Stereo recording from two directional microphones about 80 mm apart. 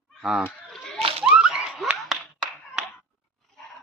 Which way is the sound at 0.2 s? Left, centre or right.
Centre.